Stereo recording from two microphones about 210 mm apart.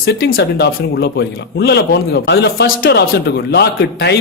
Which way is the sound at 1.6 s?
50° left (ahead or behind).